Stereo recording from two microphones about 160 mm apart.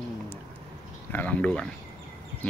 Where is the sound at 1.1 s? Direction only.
10° left (ahead or behind).